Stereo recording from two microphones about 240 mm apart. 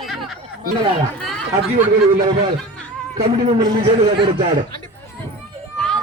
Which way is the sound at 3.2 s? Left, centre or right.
Right.